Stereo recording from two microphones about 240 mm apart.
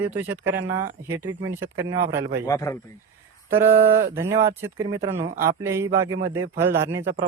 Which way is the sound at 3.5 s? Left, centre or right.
Centre.